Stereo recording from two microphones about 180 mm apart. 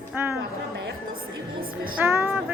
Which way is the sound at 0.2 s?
10° right (ahead or behind).